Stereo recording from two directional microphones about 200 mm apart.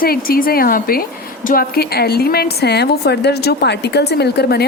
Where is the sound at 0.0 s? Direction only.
45° left (ahead or behind).